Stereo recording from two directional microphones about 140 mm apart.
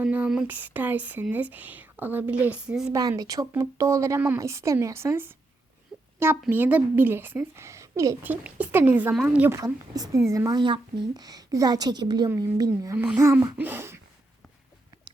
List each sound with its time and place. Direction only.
0.0 s speech: 10° right (ahead or behind)
2.9 s speech: 25° right (ahead or behind)
5.9 s a sound: centre (ahead or behind)
6.5 s speech: 10° right (ahead or behind)
9.6 s speech: 25° right (ahead or behind)